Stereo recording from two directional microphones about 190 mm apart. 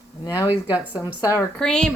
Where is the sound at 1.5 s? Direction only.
5° left (ahead or behind).